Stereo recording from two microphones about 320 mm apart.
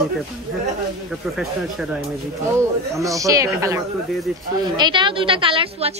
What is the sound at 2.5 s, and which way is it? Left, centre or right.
Speech, centre.